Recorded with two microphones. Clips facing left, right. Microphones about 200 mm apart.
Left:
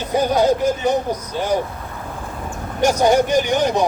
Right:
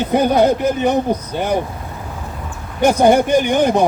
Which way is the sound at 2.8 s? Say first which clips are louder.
Right 3 dB; 55° right (ahead or behind).